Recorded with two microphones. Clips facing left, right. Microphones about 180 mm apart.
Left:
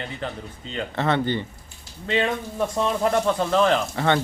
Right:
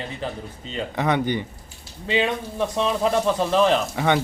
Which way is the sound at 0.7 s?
15° right (ahead or behind).